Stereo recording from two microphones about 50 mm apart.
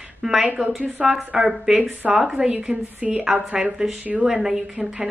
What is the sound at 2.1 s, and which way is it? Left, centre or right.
Speech, centre.